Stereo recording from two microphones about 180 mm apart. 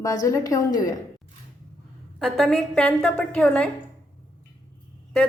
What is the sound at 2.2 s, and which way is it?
A woman's voice, centre (ahead or behind).